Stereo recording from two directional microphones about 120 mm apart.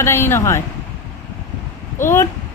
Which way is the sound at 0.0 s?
20° left (ahead or behind).